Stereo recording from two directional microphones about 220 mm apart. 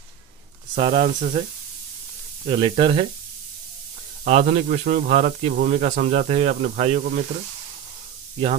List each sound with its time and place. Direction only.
0.7 s speech: 25° right (ahead or behind)
2.4 s speech: 25° right (ahead or behind)
4.2 s speech: 30° right (ahead or behind)